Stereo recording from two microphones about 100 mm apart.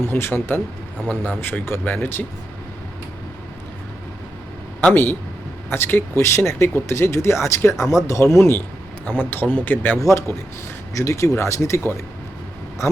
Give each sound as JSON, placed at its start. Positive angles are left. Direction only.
{"t": 0.0, "sound": "speech", "side_deg": 20}
{"t": 5.7, "sound": "speech", "side_deg": 25}
{"t": 10.0, "sound": "speech", "side_deg": 30}